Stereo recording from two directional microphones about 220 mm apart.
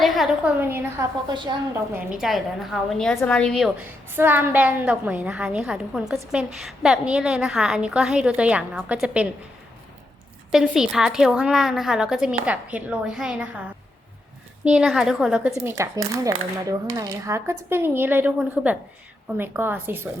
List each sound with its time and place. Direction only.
0.0 s a woman's voice: centre (ahead or behind)
1.3 s a woman's voice: 20° right (ahead or behind)
1.9 s a woman's voice: 5° right (ahead or behind)
10.5 s a woman's voice: centre (ahead or behind)
14.6 s a woman's voice: 5° right (ahead or behind)
15.7 s speech: 15° right (ahead or behind)